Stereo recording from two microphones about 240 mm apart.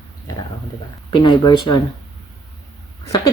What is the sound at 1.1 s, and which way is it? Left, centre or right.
Speech, centre.